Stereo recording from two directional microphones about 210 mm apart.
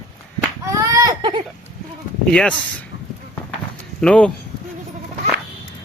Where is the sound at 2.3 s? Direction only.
5° left (ahead or behind).